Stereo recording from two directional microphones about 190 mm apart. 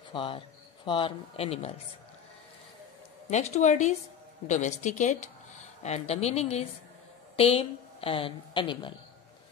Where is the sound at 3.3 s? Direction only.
35° left (ahead or behind).